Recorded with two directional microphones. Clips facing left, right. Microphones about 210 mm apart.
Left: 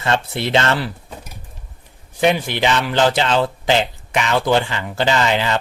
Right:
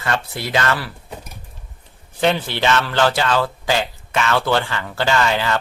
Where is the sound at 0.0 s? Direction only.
25° left (ahead or behind).